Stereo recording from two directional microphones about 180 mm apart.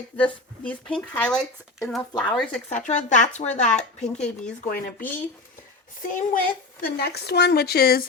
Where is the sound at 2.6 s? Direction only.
40° left (ahead or behind).